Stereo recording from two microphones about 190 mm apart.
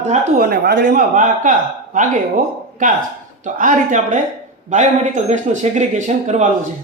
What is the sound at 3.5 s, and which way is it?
Speech, 45° right (ahead or behind).